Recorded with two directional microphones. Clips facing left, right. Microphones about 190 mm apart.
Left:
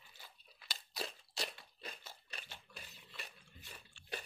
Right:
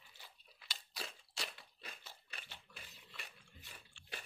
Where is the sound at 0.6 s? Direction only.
40° left (ahead or behind).